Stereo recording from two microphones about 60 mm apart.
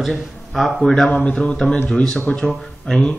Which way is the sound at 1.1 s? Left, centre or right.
Left.